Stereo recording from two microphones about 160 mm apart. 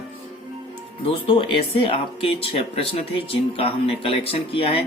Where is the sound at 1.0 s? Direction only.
35° left (ahead or behind).